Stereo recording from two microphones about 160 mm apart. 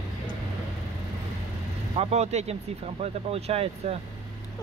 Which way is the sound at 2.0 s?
45° right (ahead or behind).